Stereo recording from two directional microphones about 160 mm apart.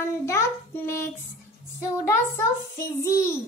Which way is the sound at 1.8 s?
15° left (ahead or behind).